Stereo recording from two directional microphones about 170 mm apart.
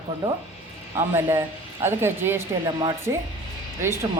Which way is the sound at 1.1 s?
15° right (ahead or behind).